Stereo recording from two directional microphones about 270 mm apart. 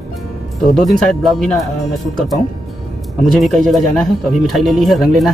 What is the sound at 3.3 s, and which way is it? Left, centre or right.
Speech, centre.